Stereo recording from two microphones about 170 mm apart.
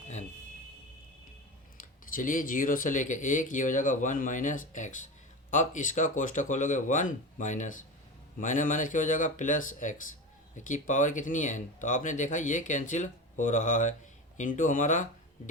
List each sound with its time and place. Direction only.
1.8 s speech: 50° left (ahead or behind)